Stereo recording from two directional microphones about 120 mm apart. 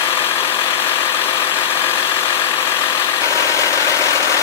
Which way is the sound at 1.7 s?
20° left (ahead or behind).